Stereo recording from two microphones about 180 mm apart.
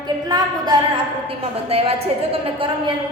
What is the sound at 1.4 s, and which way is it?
A woman's voice, 35° right (ahead or behind).